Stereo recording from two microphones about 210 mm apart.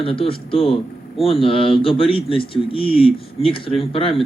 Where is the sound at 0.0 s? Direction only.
25° left (ahead or behind).